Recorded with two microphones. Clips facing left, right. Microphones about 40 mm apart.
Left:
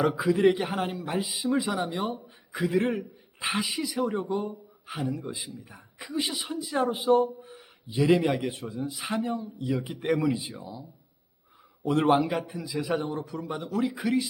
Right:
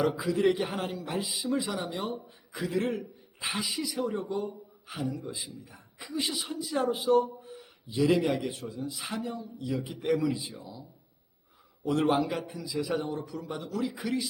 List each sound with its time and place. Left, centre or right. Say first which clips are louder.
0.2 s speech: left 4 dB; centre
11.9 s speech: left 3 dB; left